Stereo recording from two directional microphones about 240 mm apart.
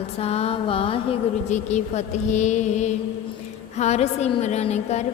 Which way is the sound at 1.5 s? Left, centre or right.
Left.